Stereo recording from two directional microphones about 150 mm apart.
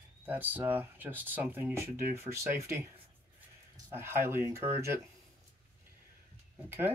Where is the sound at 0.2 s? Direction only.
10° right (ahead or behind).